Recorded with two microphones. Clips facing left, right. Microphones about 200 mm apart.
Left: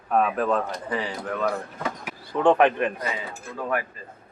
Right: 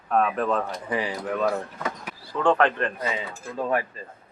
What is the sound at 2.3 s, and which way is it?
Speech, 15° left (ahead or behind).